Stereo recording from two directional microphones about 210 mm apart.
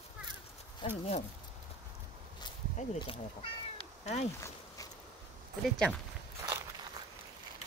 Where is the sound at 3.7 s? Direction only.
30° left (ahead or behind).